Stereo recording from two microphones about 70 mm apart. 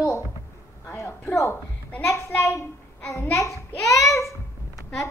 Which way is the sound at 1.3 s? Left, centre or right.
Left.